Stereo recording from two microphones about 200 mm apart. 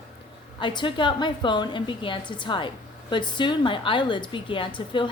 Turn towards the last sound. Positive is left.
turn(degrees=25)  # may be behind; listen again after turning